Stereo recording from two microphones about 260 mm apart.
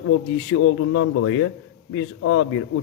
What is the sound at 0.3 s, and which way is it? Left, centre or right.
A man's voice, left.